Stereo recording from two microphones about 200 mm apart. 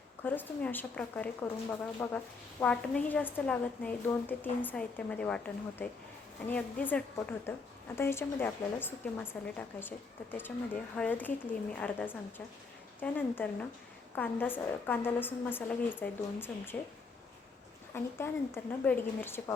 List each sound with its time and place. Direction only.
0.2 s speech: 10° left (ahead or behind)
10.9 s speech: 10° left (ahead or behind)
17.9 s speech: 10° left (ahead or behind)